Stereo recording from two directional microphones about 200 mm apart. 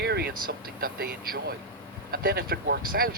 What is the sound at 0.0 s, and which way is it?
Speech, 55° right (ahead or behind).